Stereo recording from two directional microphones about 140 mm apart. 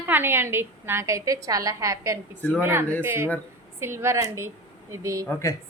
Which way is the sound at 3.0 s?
15° right (ahead or behind).